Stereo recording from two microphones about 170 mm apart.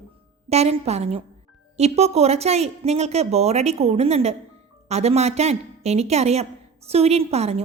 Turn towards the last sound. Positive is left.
turn(degrees=-40)  # may be behind; listen again after turning